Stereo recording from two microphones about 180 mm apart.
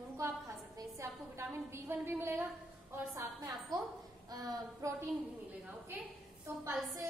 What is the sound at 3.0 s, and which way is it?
A woman's voice, 20° right (ahead or behind).